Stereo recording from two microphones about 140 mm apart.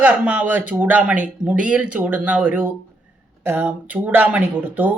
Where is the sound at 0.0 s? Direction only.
10° right (ahead or behind).